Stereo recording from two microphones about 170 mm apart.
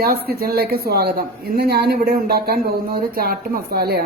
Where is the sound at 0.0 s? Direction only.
65° right (ahead or behind).